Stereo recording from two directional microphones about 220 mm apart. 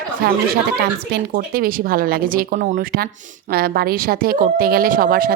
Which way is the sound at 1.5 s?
40° right (ahead or behind).